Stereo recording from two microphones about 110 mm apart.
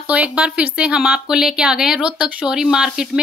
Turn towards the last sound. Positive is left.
turn(degrees=-5)  # may be behind; listen again after turning